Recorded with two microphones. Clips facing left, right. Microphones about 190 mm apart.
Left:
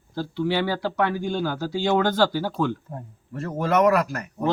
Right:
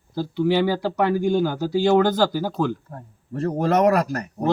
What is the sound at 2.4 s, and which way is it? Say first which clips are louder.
Speech: right 1 dB; centre (ahead or behind).